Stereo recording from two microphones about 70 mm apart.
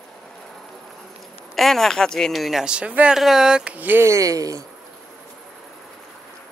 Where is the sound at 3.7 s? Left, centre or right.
Right.